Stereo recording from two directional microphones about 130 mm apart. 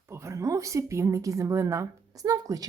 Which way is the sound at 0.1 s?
20° right (ahead or behind).